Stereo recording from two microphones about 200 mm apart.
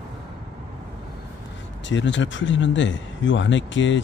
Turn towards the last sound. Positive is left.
turn(degrees=70)  # may be behind; listen again after turning